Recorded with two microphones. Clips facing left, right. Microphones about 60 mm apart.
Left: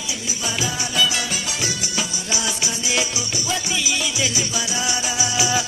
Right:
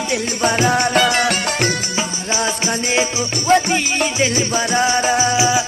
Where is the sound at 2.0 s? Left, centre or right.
Right.